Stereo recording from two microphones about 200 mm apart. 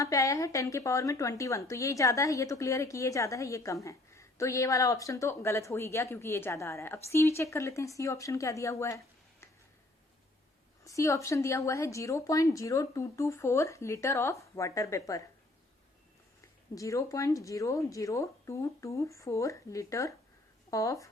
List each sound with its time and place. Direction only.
0.0 s speech: 15° left (ahead or behind)
10.8 s speech: 15° left (ahead or behind)
16.4 s speech: 15° left (ahead or behind)